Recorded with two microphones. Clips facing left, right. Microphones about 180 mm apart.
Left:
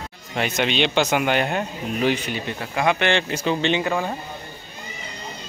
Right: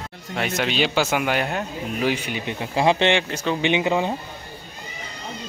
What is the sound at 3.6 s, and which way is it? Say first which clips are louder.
Speech: right 1 dB; 15° right (ahead or behind).